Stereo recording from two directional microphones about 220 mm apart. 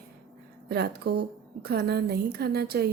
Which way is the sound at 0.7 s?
45° right (ahead or behind).